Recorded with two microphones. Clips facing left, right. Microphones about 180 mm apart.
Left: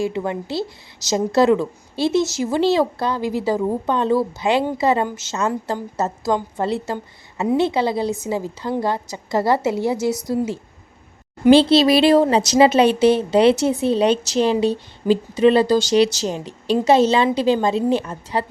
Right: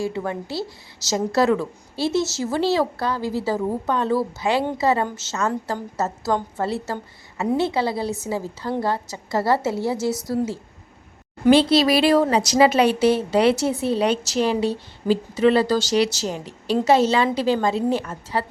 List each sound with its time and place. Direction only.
0.0 s a woman's voice: 20° left (ahead or behind)